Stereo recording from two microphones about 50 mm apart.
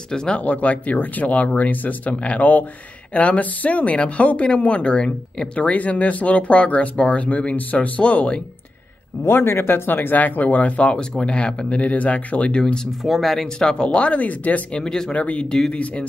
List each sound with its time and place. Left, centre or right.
0.1 s speech: centre
0.4 s speech: left
5.6 s speech: left
9.3 s speech: left
9.8 s speech: left; by 12.8 s centre
13.0 s speech: centre
13.6 s speech: centre
14.7 s speech: centre
15.1 s speech: left